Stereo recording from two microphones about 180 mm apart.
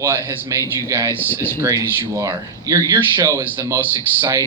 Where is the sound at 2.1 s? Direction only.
15° right (ahead or behind).